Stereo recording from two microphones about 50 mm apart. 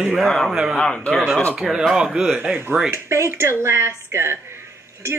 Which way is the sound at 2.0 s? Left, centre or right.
Centre.